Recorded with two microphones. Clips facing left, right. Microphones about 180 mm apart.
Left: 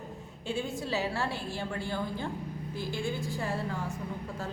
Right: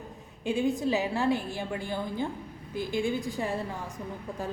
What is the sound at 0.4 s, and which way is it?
A woman's voice, 15° right (ahead or behind).